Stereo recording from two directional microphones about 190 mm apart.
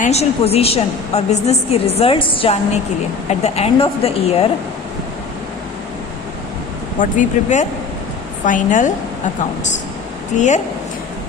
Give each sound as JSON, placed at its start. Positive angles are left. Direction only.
{"t": 0.0, "sound": "a woman's voice", "side_deg": 35}
{"t": 7.0, "sound": "a woman's voice", "side_deg": 40}
{"t": 10.3, "sound": "a woman's voice", "side_deg": 40}